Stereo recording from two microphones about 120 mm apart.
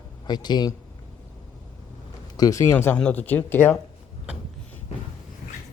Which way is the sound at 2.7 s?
15° left (ahead or behind).